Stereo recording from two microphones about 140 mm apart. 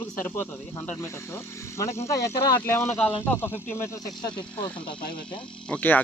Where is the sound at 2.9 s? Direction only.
10° left (ahead or behind).